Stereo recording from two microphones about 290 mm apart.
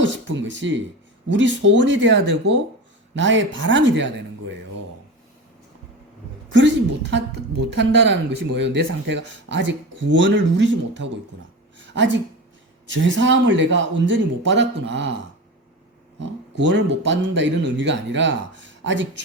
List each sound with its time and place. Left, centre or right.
0.0 s speech: right
6.5 s speech: right
16.6 s speech: right